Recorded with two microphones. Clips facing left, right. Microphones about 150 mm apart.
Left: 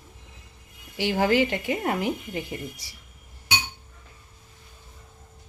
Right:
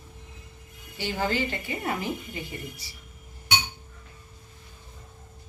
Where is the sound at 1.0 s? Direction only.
85° left.